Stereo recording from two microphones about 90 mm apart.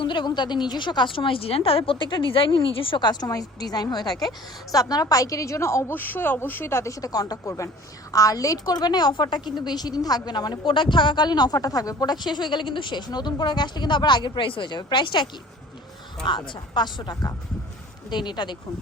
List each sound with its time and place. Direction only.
0.0 s a woman's voice: 60° left (ahead or behind)
3.1 s a woman's voice: 45° left (ahead or behind)
14.4 s speech: 65° left (ahead or behind)